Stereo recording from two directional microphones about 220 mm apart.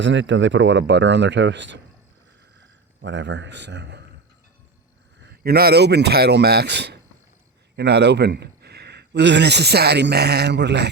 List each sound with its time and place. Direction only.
0.0 s speech: 55° right (ahead or behind)
3.0 s a man's voice: 55° right (ahead or behind)
5.2 s a man's voice: 45° right (ahead or behind)